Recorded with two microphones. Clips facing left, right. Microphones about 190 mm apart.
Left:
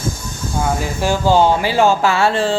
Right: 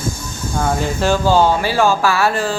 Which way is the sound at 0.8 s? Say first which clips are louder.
Right 2 dB; 15° left (ahead or behind).